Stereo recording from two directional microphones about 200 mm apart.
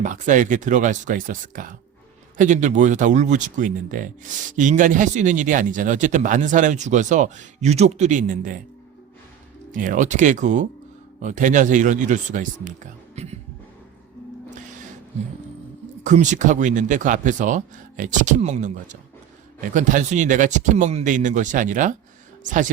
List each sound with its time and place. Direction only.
0.0 s speech: 40° right (ahead or behind)
9.7 s speech: 40° right (ahead or behind)
16.0 s speech: 35° right (ahead or behind)